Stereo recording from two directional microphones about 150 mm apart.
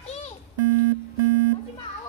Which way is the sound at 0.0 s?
45° left (ahead or behind).